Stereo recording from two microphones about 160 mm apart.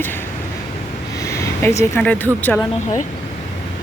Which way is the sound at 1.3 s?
20° left (ahead or behind).